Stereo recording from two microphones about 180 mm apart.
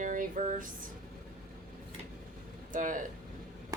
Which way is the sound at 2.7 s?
45° right (ahead or behind).